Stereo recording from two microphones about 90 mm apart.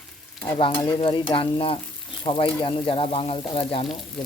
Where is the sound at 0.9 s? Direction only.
70° left (ahead or behind); by 1.8 s 90° left.